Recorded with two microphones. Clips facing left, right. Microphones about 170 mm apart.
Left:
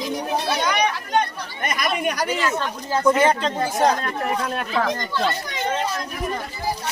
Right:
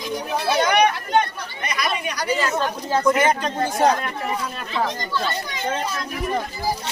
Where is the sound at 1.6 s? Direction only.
50° left (ahead or behind).